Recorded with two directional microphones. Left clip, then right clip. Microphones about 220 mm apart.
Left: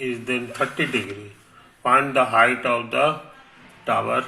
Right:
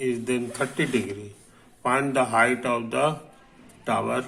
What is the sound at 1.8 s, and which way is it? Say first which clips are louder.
A man's voice: left 5 dB; 10° right (ahead or behind).